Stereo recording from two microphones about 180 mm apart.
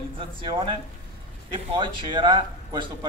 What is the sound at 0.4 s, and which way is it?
Speech, 25° right (ahead or behind).